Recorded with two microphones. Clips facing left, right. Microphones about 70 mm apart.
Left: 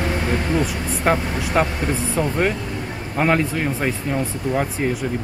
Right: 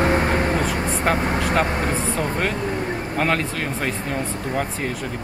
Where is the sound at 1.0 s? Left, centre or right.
Centre.